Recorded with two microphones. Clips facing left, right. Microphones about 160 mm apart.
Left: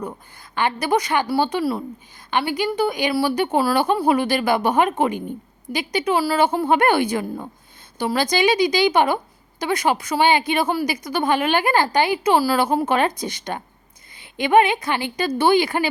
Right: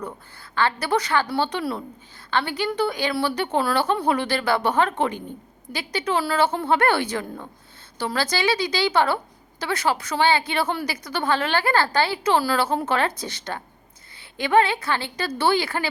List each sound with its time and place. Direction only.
0.1 s a woman's voice: 15° left (ahead or behind)